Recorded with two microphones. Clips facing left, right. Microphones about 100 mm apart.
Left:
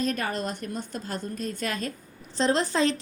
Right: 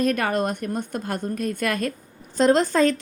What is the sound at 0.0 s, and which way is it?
A woman's voice, 55° right (ahead or behind).